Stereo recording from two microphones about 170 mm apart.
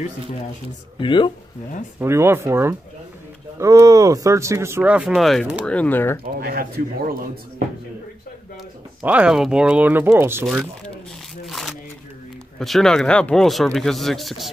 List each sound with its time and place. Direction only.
0.9 s speech: 30° left (ahead or behind)
2.0 s speech: 15° right (ahead or behind); by 6.1 s 10° left (ahead or behind)
6.4 s speech: 60° right (ahead or behind)
9.0 s speech: 5° right (ahead or behind)
11.4 s shuffling cards: centre (ahead or behind)
12.5 s speech: centre (ahead or behind)